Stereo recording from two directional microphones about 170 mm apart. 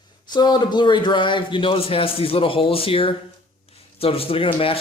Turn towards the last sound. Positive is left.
turn(degrees=35)  # may be behind; listen again after turning